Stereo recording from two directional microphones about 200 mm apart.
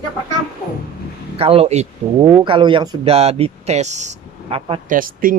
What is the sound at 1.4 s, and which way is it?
Speech, 30° right (ahead or behind).